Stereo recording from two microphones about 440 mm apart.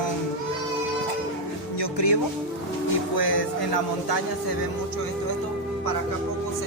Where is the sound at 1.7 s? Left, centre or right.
Left.